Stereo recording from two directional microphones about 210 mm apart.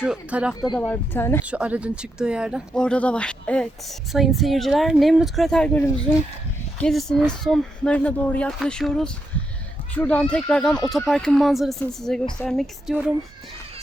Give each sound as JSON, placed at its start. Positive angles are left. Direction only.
{"t": 0.0, "sound": "speech", "side_deg": -5}
{"t": 0.6, "sound": "speech", "side_deg": 20}
{"t": 1.5, "sound": "speech", "side_deg": -5}